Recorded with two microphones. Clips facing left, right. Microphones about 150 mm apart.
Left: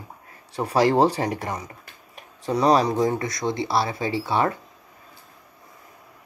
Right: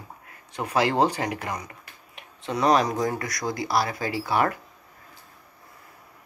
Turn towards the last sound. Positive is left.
turn(degrees=25)  # may be behind; listen again after turning